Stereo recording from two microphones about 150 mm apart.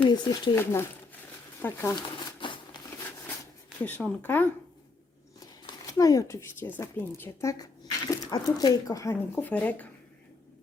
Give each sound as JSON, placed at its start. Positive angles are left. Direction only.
{"t": 0.0, "sound": "speech", "side_deg": 30}
{"t": 0.5, "sound": "speech", "side_deg": 15}
{"t": 2.0, "sound": "crumpling", "side_deg": 35}
{"t": 3.8, "sound": "speech", "side_deg": 10}
{"t": 5.6, "sound": "speech", "side_deg": 25}